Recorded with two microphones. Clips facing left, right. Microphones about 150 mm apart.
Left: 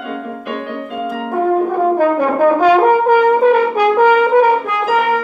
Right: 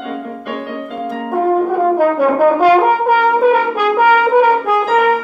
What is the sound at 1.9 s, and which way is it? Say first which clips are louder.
Brass instrument: right 1 dB; 10° right (ahead or behind).